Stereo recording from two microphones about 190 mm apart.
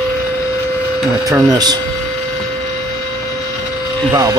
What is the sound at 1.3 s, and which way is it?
Speech, 20° right (ahead or behind).